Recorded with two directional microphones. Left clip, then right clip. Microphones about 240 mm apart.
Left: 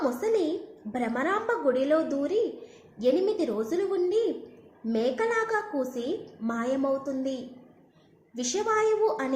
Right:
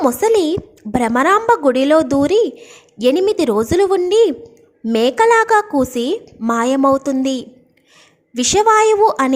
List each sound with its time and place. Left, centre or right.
0.0 s a woman's voice: right